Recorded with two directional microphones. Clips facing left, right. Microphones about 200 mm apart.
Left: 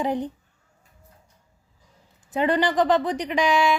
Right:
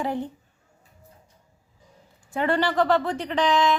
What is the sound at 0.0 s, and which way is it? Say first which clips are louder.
Speech: left 2 dB; 20° left (ahead or behind).